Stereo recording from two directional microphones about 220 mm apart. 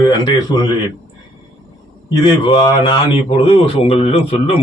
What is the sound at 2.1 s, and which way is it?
A man's voice, 20° left (ahead or behind).